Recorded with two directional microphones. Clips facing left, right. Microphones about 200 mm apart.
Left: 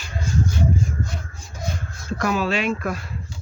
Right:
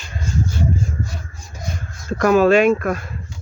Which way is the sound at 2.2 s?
50° right (ahead or behind).